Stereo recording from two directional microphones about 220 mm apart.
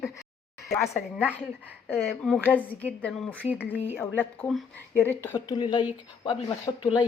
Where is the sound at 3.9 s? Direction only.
10° left (ahead or behind).